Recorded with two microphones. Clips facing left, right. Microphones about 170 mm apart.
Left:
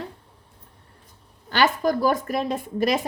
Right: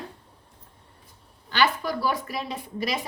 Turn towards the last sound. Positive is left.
turn(degrees=50)  # may be behind; listen again after turning